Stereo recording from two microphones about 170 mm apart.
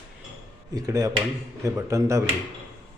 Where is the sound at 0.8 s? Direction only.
20° right (ahead or behind).